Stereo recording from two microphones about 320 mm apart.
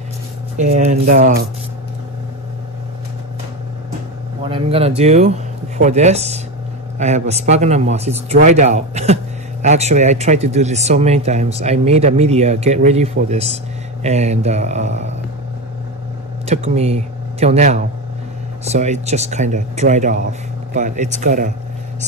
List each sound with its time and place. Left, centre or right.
0.6 s speech: right
4.5 s speech: centre
16.4 s speech: centre